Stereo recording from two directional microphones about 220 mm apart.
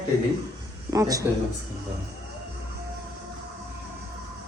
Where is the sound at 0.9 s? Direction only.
15° right (ahead or behind).